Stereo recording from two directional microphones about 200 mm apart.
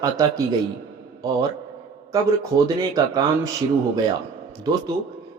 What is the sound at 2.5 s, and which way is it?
Speech, 20° right (ahead or behind).